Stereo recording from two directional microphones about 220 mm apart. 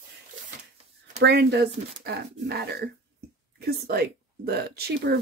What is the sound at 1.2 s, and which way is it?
Speech, 50° right (ahead or behind).